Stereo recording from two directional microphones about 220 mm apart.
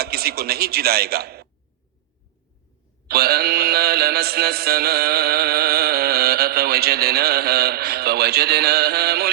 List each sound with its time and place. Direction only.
0.0 s mantra: 45° right (ahead or behind)
3.1 s mantra: 45° right (ahead or behind)